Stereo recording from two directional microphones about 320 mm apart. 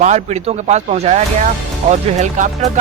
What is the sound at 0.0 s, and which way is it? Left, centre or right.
Speech, right.